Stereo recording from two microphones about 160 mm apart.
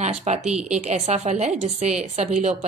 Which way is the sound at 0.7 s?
45° right (ahead or behind).